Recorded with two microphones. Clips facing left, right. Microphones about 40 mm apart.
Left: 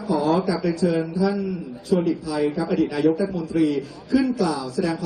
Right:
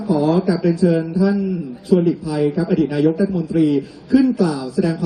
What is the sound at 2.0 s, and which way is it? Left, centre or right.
A man's voice, centre.